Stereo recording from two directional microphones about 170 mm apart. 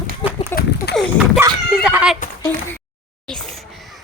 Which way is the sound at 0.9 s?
75° left (ahead or behind).